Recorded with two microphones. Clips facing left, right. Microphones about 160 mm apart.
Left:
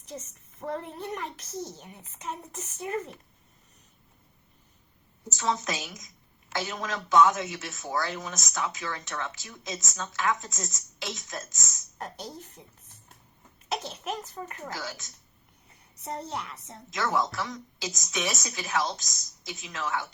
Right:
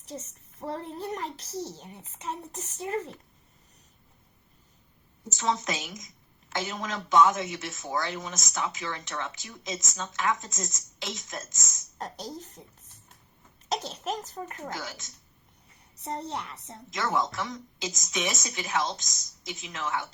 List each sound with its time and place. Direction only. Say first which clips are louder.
0.0 s a child's voice: right 1 dB; 30° right (ahead or behind)
5.3 s speech: even; 25° right (ahead or behind)
13.7 s a child's voice: right 2 dB; 35° right (ahead or behind)
14.7 s speech: even; 25° right (ahead or behind)